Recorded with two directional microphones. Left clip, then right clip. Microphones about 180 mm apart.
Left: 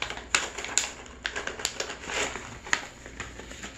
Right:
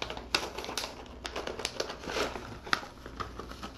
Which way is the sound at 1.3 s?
40° right (ahead or behind).